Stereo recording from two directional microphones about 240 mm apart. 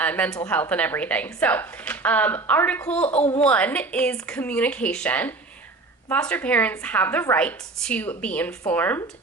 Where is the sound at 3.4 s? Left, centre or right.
Centre.